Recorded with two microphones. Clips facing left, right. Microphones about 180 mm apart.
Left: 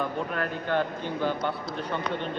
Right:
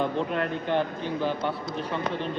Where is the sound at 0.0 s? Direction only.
25° right (ahead or behind).